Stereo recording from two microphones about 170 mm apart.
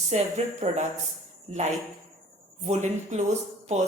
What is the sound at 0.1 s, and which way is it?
Speech, 40° right (ahead or behind).